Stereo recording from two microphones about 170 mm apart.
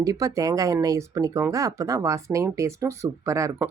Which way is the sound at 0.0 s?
20° right (ahead or behind).